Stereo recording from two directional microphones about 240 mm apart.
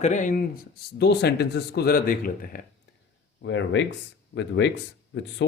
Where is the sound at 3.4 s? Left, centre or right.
Left.